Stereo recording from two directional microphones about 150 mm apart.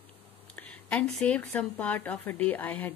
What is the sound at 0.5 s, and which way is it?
Speech, 10° left (ahead or behind).